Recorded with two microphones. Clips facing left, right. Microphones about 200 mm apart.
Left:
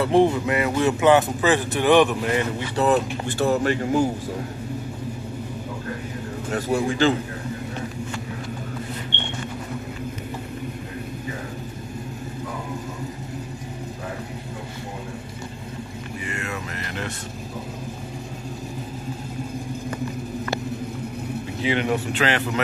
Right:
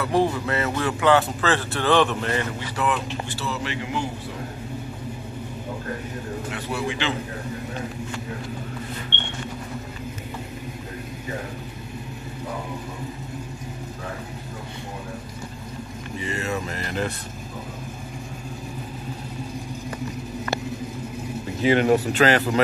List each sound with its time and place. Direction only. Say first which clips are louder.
0.0 s speech: left 4 dB; 25° left (ahead or behind)
2.7 s speech: left 6 dB; 35° left (ahead or behind)
3.3 s a man's voice: left 9 dB; 50° left (ahead or behind)
6.5 s a man's voice: left 8 dB; 45° left (ahead or behind)
16.3 s music: right 5 dB; 30° right (ahead or behind)
21.6 s speech: right 5 dB; 40° right (ahead or behind)